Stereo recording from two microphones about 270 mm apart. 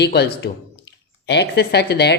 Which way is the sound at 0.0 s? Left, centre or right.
Left.